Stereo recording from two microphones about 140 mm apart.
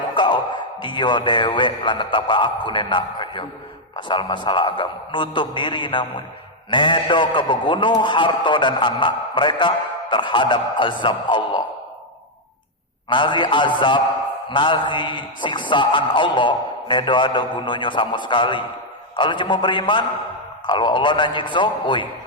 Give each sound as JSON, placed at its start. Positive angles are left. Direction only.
{"t": 0.1, "sound": "music", "side_deg": 35}
{"t": 0.8, "sound": "a man's voice", "side_deg": 35}
{"t": 13.1, "sound": "a man's voice", "side_deg": 35}